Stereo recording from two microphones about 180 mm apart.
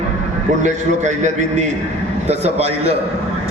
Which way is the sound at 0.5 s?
40° right (ahead or behind).